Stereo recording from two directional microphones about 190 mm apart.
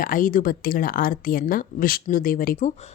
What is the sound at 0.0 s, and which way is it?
A woman's voice, 45° left (ahead or behind).